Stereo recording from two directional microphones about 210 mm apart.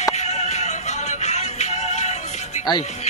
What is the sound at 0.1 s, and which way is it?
Music, 35° left (ahead or behind).